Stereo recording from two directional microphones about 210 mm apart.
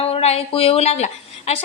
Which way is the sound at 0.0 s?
30° left (ahead or behind).